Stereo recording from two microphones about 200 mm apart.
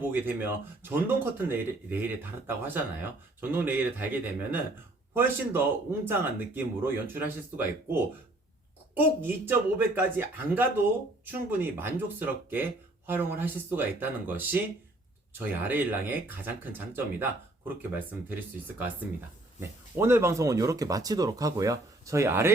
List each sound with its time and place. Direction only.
0.0 s speech: 10° right (ahead or behind)
19.5 s speech: 10° right (ahead or behind)